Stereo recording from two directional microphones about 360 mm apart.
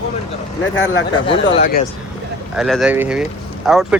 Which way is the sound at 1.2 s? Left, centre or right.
Centre.